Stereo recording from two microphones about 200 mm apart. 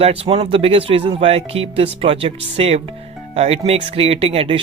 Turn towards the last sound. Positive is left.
turn(degrees=-30)  # may be behind; listen again after turning